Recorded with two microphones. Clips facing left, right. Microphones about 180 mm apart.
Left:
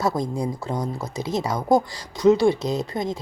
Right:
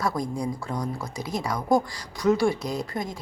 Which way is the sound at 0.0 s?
25° left (ahead or behind).